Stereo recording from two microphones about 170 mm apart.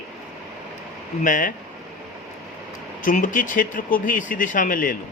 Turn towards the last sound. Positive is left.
turn(degrees=55)  # may be behind; listen again after turning